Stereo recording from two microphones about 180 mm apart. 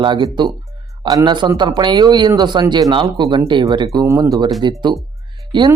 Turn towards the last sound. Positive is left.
turn(degrees=-25)  # may be behind; listen again after turning